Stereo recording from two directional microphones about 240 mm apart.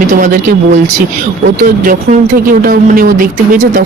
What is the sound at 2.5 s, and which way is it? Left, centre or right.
Speech, right.